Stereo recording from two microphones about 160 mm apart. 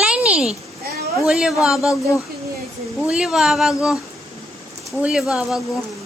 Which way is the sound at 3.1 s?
5° right (ahead or behind).